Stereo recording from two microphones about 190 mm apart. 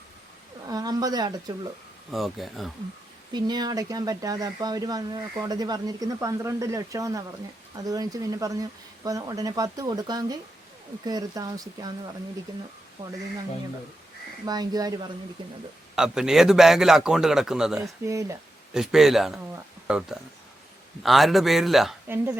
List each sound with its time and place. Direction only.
0.7 s speech: 20° right (ahead or behind)
2.1 s a man's voice: centre (ahead or behind)
3.3 s speech: 20° right (ahead or behind)
13.0 s speech: 40° right (ahead or behind)
14.4 s speech: 20° right (ahead or behind)
16.0 s a man's voice: 5° right (ahead or behind)
18.0 s speech: 15° right (ahead or behind)
18.7 s a man's voice: 5° right (ahead or behind)